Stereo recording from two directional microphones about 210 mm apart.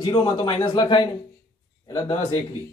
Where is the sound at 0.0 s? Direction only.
20° left (ahead or behind).